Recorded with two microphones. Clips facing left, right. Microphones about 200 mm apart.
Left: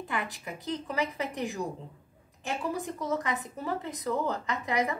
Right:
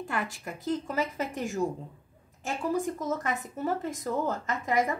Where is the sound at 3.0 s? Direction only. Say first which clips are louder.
Even; 45° right (ahead or behind).